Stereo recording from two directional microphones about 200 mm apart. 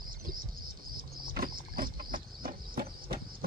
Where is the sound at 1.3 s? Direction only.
45° right (ahead or behind).